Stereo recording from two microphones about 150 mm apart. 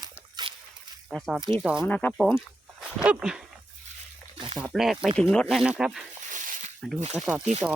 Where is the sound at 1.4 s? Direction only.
30° right (ahead or behind).